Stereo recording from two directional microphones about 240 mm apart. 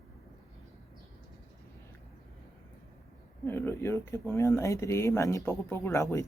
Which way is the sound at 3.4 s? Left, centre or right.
Centre.